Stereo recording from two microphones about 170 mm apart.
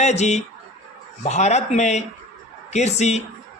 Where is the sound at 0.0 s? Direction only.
40° left (ahead or behind).